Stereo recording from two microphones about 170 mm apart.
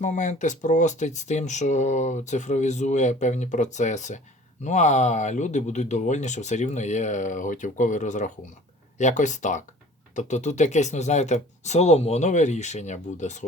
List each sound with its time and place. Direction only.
0.0 s speech: 45° left (ahead or behind)